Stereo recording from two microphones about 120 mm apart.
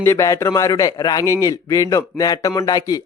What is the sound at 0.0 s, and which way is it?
A man's voice, 25° left (ahead or behind).